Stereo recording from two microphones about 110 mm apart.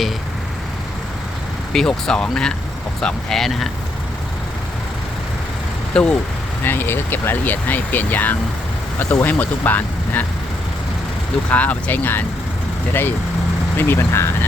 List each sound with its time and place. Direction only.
1.7 s speech: 5° left (ahead or behind)
5.9 s speech: 10° left (ahead or behind)
11.5 s speech: 15° left (ahead or behind)